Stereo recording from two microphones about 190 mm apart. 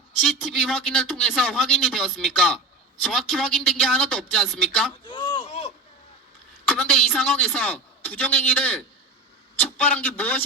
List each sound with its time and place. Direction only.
0.2 s a man's voice: centre (ahead or behind)
5.0 s a sound: 25° left (ahead or behind)
6.7 s a man's voice: centre (ahead or behind)